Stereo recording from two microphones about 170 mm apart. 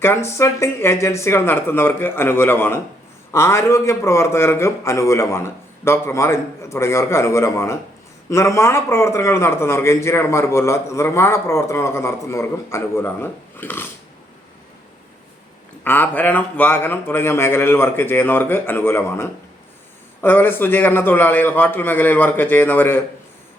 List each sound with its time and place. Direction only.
0.0 s a man's voice: 15° left (ahead or behind)
15.8 s a man's voice: 10° left (ahead or behind)